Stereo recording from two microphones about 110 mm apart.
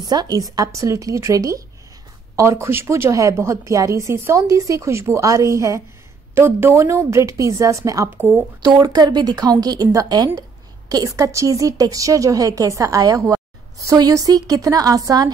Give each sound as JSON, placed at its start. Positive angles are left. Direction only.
{"t": 0.0, "sound": "a woman's voice", "side_deg": -40}
{"t": 8.1, "sound": "speech", "side_deg": -15}
{"t": 8.6, "sound": "a woman's voice", "side_deg": -35}